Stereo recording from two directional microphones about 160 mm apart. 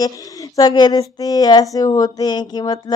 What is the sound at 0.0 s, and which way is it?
A woman's voice, 20° left (ahead or behind).